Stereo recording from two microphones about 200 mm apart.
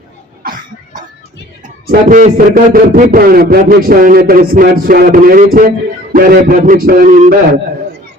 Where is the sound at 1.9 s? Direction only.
40° right (ahead or behind).